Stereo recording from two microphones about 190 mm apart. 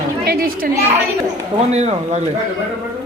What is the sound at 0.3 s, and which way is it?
Speech, 50° right (ahead or behind).